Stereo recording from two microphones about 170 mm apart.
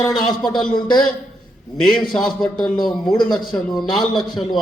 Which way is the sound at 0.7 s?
25° left (ahead or behind).